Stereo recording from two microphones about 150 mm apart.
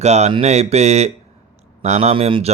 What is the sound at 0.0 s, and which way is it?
Speech, 45° right (ahead or behind).